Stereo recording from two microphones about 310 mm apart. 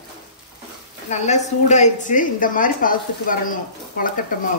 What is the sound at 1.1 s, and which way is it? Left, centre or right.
Speech, left.